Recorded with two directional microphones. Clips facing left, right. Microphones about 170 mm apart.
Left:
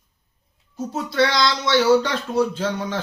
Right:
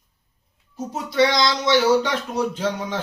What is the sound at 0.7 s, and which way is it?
Speech, 15° right (ahead or behind).